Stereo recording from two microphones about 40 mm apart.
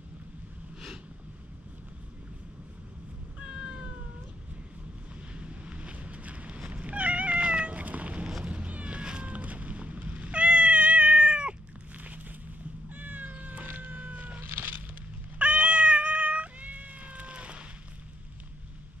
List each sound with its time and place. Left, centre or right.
3.3 s cat: right
5.3 s cat: right
9.3 s cat: right
11.9 s a sound: right
12.9 s cat: right
13.7 s a sound: right
14.4 s cat: right
15.3 s cat: right